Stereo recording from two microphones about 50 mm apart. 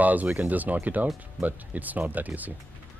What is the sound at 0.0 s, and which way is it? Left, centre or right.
Speech, right.